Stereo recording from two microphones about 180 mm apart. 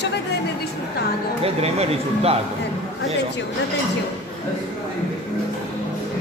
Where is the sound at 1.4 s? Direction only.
35° right (ahead or behind).